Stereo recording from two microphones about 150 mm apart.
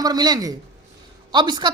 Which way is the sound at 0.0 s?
25° right (ahead or behind).